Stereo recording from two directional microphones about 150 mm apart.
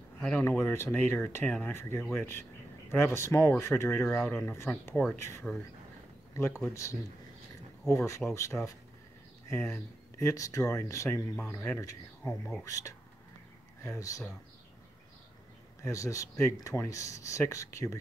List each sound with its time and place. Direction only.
0.2 s speech: 10° left (ahead or behind)
6.3 s speech: 20° left (ahead or behind)
8.5 s speech: 5° left (ahead or behind)
9.5 s speech: 20° left (ahead or behind)
11.8 s speech: 20° left (ahead or behind)
15.8 s speech: 20° left (ahead or behind)